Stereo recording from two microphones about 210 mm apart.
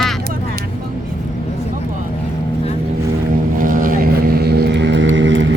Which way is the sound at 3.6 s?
40° right (ahead or behind).